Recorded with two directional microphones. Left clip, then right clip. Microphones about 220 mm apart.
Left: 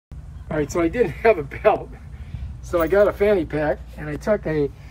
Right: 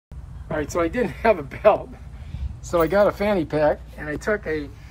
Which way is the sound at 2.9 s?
25° right (ahead or behind).